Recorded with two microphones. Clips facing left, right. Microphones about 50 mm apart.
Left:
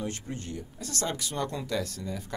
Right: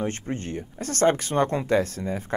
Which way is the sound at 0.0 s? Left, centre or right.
Right.